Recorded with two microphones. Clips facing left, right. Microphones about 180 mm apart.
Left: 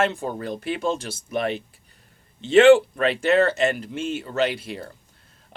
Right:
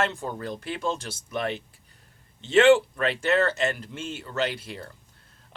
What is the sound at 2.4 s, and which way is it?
Speech, 15° left (ahead or behind).